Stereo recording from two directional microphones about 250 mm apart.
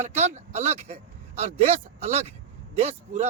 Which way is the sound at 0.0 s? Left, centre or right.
Right.